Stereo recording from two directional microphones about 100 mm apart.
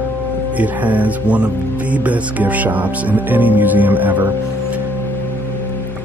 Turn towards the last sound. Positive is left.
turn(degrees=-15)  # may be behind; listen again after turning